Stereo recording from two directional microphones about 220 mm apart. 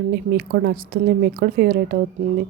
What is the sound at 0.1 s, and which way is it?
A woman's voice, 45° right (ahead or behind).